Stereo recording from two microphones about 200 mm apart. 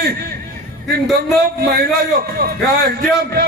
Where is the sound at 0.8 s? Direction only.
Centre (ahead or behind).